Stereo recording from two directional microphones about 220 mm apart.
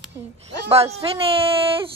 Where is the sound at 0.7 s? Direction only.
25° right (ahead or behind).